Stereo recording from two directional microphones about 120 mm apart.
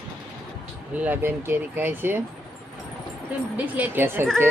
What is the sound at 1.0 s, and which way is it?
Speech, 15° right (ahead or behind).